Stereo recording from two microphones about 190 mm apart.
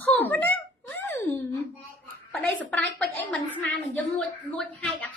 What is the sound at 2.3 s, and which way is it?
A woman's voice, 5° left (ahead or behind).